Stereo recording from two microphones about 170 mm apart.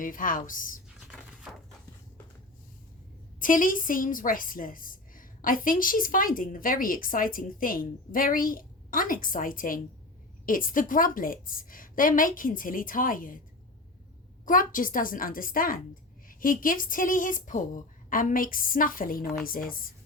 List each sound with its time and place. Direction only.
0.0 s a woman's voice: 55° left (ahead or behind)
3.4 s a woman's voice: 55° left (ahead or behind)
14.4 s a woman's voice: 55° left (ahead or behind)